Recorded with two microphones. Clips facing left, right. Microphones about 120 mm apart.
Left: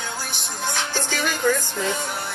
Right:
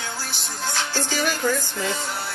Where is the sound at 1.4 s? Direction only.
10° right (ahead or behind).